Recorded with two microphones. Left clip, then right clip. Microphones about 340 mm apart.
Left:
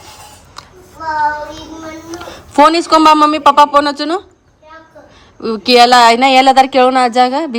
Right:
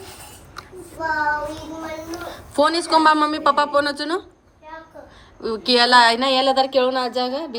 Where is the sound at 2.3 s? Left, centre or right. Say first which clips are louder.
Left 10 dB; centre.